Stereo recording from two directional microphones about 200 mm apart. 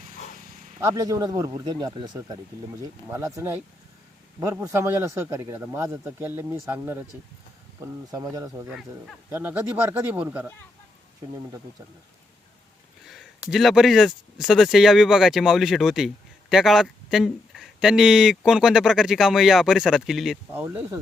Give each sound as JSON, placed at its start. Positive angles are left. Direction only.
{"t": 0.4, "sound": "zipper", "side_deg": -45}
{"t": 0.8, "sound": "a man's voice", "side_deg": -15}
{"t": 13.1, "sound": "speech", "side_deg": 0}
{"t": 20.5, "sound": "a man's voice", "side_deg": -10}